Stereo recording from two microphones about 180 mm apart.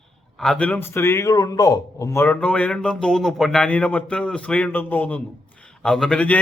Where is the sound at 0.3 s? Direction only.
5° left (ahead or behind); by 2.2 s 20° left (ahead or behind).